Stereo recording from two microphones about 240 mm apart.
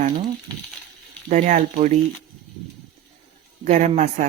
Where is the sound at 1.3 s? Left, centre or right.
Right.